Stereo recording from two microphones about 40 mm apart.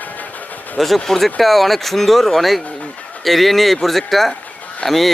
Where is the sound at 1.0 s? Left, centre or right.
Centre.